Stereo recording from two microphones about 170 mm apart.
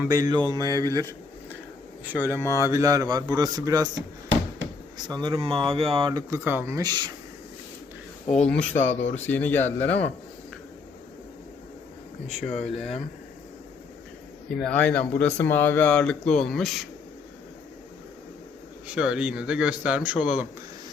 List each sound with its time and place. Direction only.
0.1 s speech: 20° right (ahead or behind)
2.3 s speech: 15° left (ahead or behind)
2.6 s speech: 20° right (ahead or behind)
5.0 s speech: 25° right (ahead or behind)
8.4 s speech: 5° left (ahead or behind)
8.8 s speech: 90° left
9.1 s speech: 10° left (ahead or behind)
12.6 s speech: centre (ahead or behind)
14.5 s speech: 5° left (ahead or behind)
18.9 s a man's voice: 5° right (ahead or behind)